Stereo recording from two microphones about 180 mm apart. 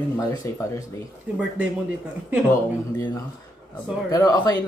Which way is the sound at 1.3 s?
10° right (ahead or behind).